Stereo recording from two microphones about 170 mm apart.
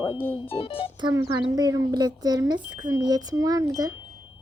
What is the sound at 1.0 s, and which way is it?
Speech, 25° right (ahead or behind).